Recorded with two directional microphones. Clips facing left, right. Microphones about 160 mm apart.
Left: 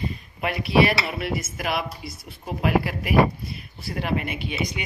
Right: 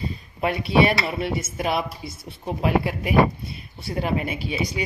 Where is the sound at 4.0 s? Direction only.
35° right (ahead or behind).